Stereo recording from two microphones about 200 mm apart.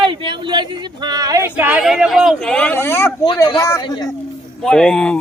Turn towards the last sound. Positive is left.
turn(degrees=5)  # may be behind; listen again after turning